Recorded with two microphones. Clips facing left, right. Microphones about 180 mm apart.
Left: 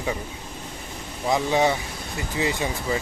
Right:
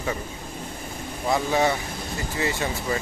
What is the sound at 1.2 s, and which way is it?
A man's voice, 15° left (ahead or behind).